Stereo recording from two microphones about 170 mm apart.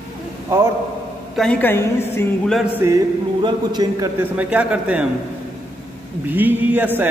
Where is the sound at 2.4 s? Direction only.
Centre (ahead or behind).